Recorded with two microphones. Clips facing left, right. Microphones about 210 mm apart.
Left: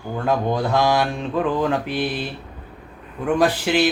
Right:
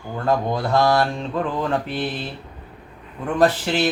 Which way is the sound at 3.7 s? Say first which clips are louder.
Left 3 dB; 10° left (ahead or behind).